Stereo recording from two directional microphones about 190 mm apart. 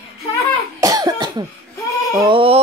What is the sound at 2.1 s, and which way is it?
Speech, 25° right (ahead or behind).